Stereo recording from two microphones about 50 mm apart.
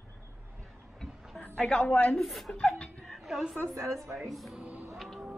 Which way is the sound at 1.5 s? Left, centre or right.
Centre.